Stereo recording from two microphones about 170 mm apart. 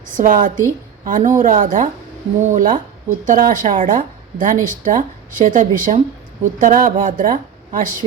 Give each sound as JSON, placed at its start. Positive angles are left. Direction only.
{"t": 0.2, "sound": "a woman's voice", "side_deg": -55}